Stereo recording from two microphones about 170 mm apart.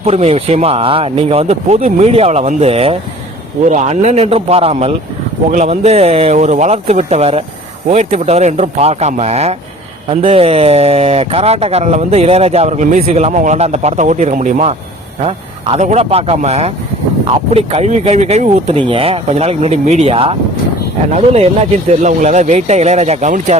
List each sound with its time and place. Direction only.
0.0 s speech: 35° right (ahead or behind)